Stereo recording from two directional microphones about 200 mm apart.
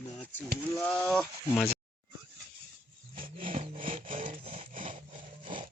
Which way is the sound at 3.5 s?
35° right (ahead or behind).